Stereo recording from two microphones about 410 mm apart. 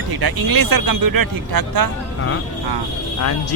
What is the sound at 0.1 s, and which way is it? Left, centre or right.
Speech, right.